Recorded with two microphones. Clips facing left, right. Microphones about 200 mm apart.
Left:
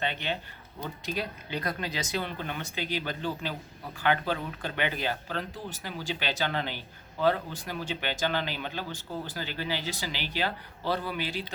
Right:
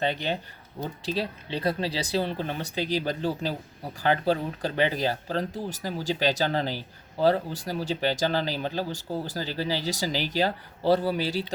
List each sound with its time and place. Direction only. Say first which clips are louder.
0.0 s speech: right 5 dB; 40° right (ahead or behind)